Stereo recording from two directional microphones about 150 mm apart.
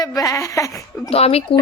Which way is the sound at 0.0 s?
20° left (ahead or behind).